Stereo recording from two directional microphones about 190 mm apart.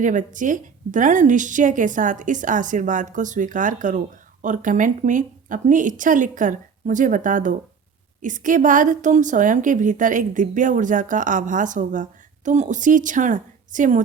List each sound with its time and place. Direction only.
0.0 s a woman's voice: 40° right (ahead or behind)